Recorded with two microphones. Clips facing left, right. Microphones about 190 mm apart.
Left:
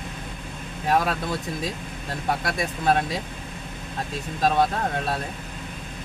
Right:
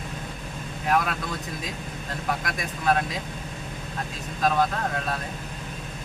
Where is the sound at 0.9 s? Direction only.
30° left (ahead or behind).